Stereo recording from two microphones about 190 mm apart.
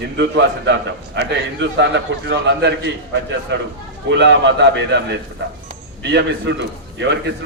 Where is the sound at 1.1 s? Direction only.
65° right (ahead or behind).